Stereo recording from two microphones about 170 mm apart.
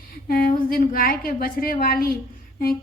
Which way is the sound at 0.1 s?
60° left (ahead or behind).